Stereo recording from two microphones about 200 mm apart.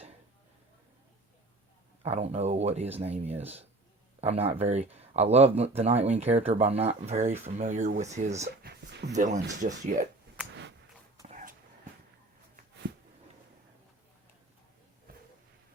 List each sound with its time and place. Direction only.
2.0 s speech: 30° right (ahead or behind)
8.6 s speech: 55° right (ahead or behind)
9.1 s speech: 40° right (ahead or behind)
11.3 s a sound: 40° right (ahead or behind)